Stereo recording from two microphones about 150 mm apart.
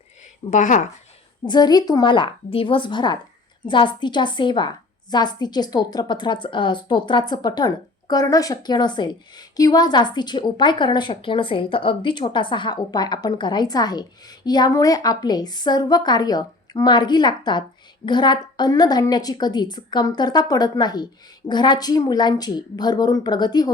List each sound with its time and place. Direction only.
0.5 s speech: 55° left (ahead or behind)
1.5 s a woman's voice: 30° left (ahead or behind)